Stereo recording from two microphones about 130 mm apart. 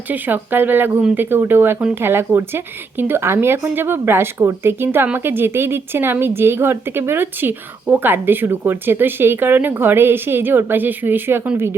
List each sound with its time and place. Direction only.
0.1 s speech: 15° right (ahead or behind)